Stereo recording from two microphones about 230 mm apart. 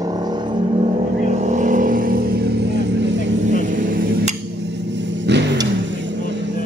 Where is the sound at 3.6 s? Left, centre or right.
Right.